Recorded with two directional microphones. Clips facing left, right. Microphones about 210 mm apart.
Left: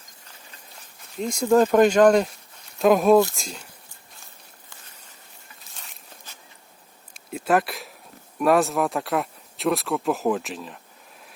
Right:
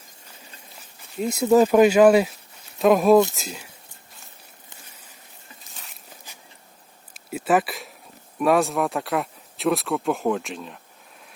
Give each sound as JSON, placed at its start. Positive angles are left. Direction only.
{"t": 1.2, "sound": "speech", "side_deg": -5}
{"t": 5.7, "sound": "a sound", "side_deg": 0}
{"t": 7.1, "sound": "speech", "side_deg": -5}